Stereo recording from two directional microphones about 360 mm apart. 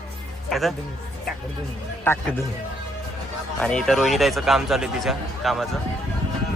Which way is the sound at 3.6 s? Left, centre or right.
Centre.